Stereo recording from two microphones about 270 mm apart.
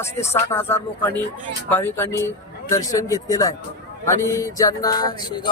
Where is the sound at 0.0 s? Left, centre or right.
Centre.